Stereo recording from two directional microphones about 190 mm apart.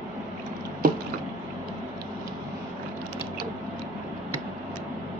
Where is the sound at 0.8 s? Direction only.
45° right (ahead or behind).